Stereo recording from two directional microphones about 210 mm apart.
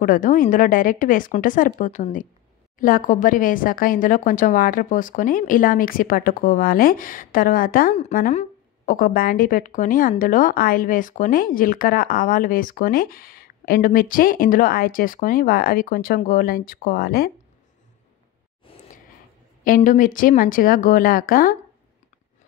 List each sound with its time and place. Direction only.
0.0 s a woman's voice: 40° left (ahead or behind)
18.7 s a sound: 25° left (ahead or behind)
19.6 s a woman's voice: 40° left (ahead or behind)